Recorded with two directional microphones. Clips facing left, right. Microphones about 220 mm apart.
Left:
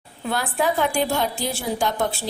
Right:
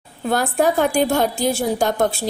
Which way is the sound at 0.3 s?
45° right (ahead or behind).